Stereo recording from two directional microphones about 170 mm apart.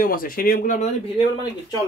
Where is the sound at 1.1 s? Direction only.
25° left (ahead or behind).